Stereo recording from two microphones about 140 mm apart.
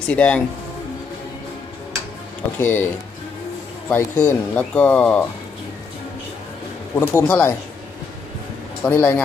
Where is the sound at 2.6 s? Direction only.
15° left (ahead or behind).